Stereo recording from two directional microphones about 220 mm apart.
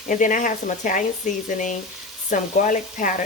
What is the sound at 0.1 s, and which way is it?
Speech, 35° left (ahead or behind).